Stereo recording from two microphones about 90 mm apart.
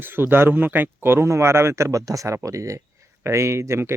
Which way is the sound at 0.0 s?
25° right (ahead or behind).